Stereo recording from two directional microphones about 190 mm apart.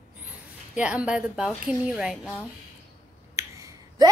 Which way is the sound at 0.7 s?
5° right (ahead or behind).